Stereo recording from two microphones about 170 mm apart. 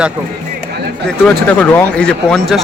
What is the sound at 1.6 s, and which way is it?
Speech, 10° left (ahead or behind).